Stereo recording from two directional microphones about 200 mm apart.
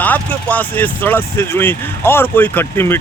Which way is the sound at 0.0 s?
10° left (ahead or behind).